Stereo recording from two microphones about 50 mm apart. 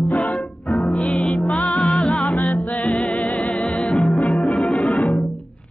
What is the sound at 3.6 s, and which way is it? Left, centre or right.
Music, left.